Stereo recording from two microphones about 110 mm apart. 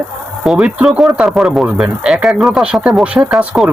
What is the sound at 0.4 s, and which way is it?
Speech, 5° right (ahead or behind).